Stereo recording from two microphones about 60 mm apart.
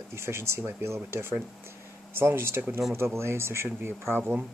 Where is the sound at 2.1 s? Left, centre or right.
Right.